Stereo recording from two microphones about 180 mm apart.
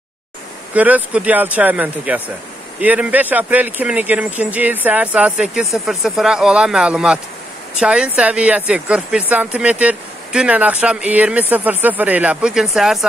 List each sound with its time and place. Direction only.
0.7 s speech: 10° right (ahead or behind)